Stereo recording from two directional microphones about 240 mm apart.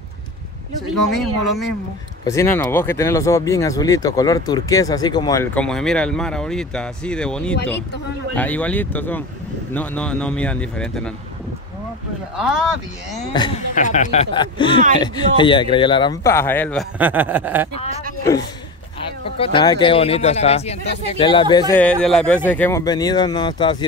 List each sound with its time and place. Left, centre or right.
1.1 s speech: centre
12.4 s speech: centre
13.4 s speech: centre
13.7 s speech: left
14.3 s speech: centre
17.0 s chuckle: centre
19.3 s speech: left